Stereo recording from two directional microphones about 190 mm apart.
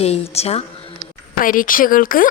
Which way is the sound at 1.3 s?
45° left (ahead or behind).